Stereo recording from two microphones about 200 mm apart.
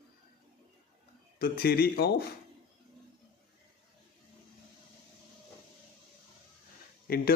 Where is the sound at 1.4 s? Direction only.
50° left (ahead or behind).